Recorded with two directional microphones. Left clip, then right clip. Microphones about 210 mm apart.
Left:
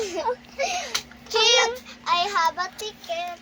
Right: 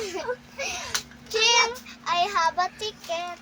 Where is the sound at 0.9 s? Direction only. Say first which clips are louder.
Left 2 dB; 15° right (ahead or behind).